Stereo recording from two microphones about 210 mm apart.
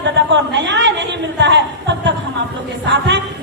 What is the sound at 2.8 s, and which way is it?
Music, 55° right (ahead or behind).